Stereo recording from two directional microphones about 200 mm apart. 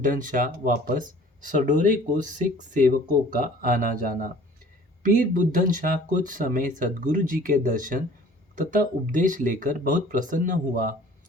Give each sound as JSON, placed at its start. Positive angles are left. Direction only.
{"t": 0.0, "sound": "speech", "side_deg": -40}